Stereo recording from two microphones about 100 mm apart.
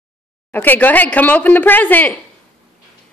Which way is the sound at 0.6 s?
20° left (ahead or behind).